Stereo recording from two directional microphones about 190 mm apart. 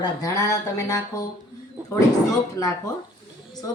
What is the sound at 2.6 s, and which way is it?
Speech, 15° left (ahead or behind).